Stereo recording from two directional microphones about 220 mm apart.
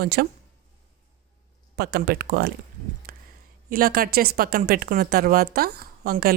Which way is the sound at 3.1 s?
45° right (ahead or behind).